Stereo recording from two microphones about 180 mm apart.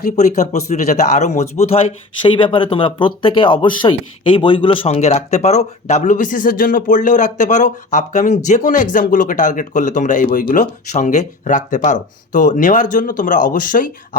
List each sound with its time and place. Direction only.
0.2 s a man's voice: 40° left (ahead or behind)